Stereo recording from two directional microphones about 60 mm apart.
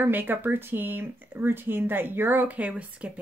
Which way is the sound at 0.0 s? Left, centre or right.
Right.